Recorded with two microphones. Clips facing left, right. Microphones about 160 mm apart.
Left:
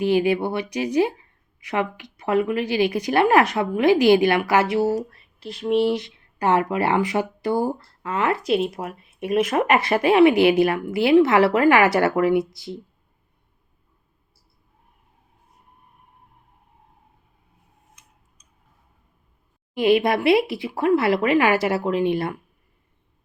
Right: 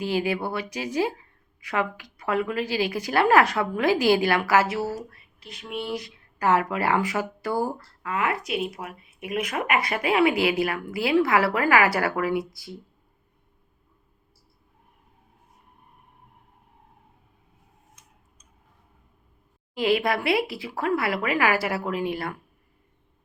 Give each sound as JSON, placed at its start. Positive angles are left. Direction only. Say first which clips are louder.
{"t": 0.0, "sound": "speech", "louder": "left 6 dB", "side_deg": 20}
{"t": 5.1, "sound": "a sound", "louder": "left 10 dB", "side_deg": 30}
{"t": 5.9, "sound": "speech", "louder": "left 6 dB", "side_deg": 25}
{"t": 19.7, "sound": "speech", "louder": "left 5 dB", "side_deg": 20}